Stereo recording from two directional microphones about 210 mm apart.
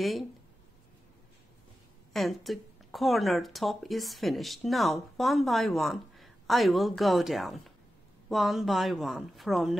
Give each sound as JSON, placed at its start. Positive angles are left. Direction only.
{"t": 0.0, "sound": "speech", "side_deg": 0}
{"t": 2.1, "sound": "speech", "side_deg": 0}